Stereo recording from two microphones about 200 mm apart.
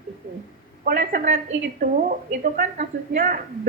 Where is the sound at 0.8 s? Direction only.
45° right (ahead or behind).